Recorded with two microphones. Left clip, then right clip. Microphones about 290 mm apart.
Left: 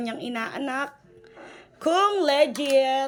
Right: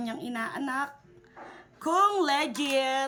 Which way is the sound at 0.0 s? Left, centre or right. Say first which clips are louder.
Left 4 dB; centre.